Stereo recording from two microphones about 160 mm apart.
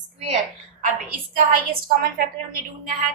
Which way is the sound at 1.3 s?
65° right (ahead or behind).